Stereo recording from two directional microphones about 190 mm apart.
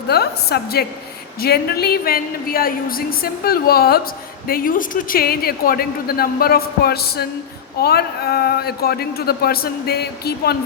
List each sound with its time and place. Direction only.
0.1 s a man's voice: 55° left (ahead or behind)